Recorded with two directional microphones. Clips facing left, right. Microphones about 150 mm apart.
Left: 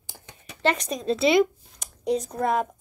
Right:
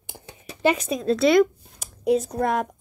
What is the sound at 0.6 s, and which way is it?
Speech, 5° right (ahead or behind).